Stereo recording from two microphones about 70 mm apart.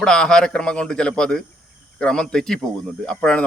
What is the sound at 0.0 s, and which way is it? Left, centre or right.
A man's voice, centre.